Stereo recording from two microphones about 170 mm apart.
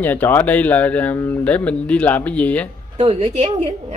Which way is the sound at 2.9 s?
35° right (ahead or behind).